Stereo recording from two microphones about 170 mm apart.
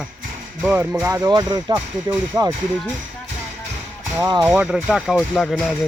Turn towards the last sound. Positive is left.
turn(degrees=0)  # may be behind; listen again after turning